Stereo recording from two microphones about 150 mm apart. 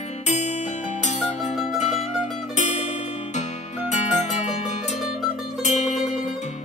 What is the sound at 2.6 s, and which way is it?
Music, 50° left (ahead or behind).